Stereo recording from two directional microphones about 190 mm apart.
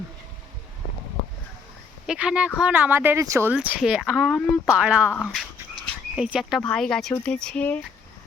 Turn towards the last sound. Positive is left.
turn(degrees=5)  # may be behind; listen again after turning